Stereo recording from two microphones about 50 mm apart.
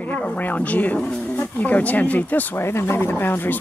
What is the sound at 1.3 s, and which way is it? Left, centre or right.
Speech, left.